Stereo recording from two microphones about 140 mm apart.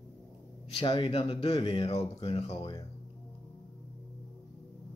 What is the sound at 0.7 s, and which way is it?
Speech, 40° left (ahead or behind).